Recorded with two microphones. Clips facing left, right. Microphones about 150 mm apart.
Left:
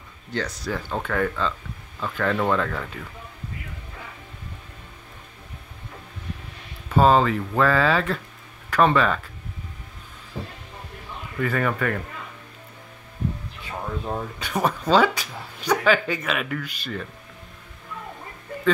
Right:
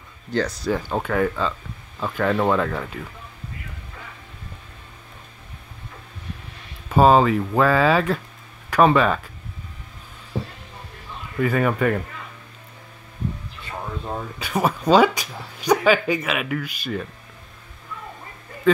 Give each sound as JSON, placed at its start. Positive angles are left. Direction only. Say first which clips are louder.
{"t": 0.3, "sound": "speech", "louder": "right 5 dB", "side_deg": -40}
{"t": 0.7, "sound": "speech", "louder": "right 4 dB", "side_deg": -20}
{"t": 7.0, "sound": "speech", "louder": "right 3 dB", "side_deg": -15}
{"t": 11.4, "sound": "speech", "louder": "right 4 dB", "side_deg": -15}
{"t": 13.7, "sound": "speech", "louder": "left 1 dB", "side_deg": 0}